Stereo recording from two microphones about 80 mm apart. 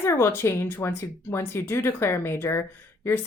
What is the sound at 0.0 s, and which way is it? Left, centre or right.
Speech, left.